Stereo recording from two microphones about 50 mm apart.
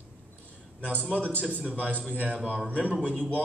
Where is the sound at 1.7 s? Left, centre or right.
Right.